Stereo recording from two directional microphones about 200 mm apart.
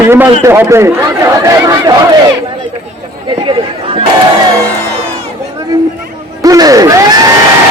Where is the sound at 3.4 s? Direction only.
25° right (ahead or behind).